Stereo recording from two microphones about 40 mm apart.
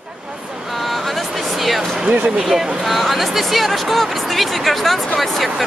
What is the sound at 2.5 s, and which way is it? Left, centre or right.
Speech, centre.